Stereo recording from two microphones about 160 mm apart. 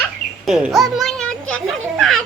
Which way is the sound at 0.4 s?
Centre (ahead or behind).